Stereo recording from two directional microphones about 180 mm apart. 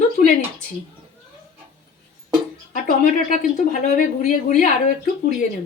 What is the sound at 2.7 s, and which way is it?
A woman's voice, 45° left (ahead or behind).